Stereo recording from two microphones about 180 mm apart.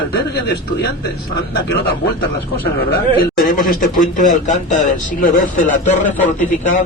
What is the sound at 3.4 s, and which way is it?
Speech, 50° left (ahead or behind).